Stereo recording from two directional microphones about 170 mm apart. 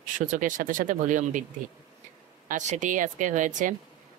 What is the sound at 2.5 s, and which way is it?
Speech, 45° right (ahead or behind).